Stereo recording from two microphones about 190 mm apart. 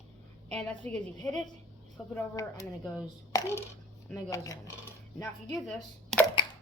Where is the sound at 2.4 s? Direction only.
15° left (ahead or behind).